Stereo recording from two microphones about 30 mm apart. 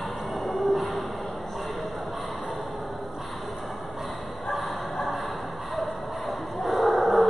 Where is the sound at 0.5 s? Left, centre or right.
Centre.